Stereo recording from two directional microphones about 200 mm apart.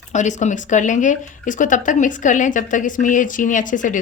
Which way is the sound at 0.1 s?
35° left (ahead or behind).